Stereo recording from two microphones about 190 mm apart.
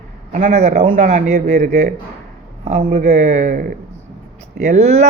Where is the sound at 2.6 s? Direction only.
35° right (ahead or behind).